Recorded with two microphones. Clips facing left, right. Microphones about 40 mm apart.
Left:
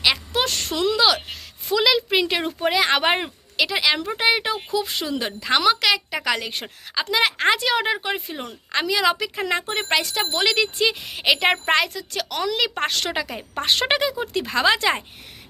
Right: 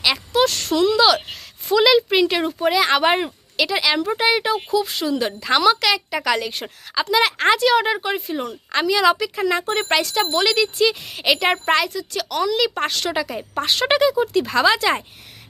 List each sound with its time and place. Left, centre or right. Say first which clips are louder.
0.3 s a woman's voice: right 5 dB; left; by 1.2 s centre
1.6 s speech: right 4 dB; centre
2.1 s speech: right 3 dB; centre
7.3 s speech: right 4 dB; centre
9.1 s speech: right 3 dB; centre
9.6 s speech: right 3 dB; centre
10.4 s speech: even; left
11.7 s speech: right 1 dB; left
13.8 s speech: right 5 dB; centre